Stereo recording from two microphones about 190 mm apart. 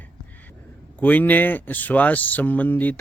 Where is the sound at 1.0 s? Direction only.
10° left (ahead or behind).